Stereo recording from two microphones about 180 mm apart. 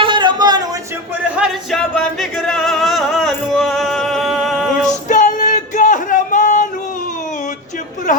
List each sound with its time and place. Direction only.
0.0 s a sound: 25° right (ahead or behind)
1.4 s music: centre (ahead or behind)
4.9 s music: 45° left (ahead or behind)